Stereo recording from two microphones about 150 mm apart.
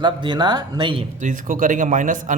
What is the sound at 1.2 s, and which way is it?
A man's voice, 60° right (ahead or behind).